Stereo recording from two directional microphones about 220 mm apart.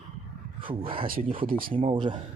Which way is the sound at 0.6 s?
25° right (ahead or behind).